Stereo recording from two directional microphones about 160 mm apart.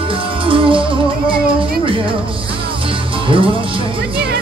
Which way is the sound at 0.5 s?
35° right (ahead or behind).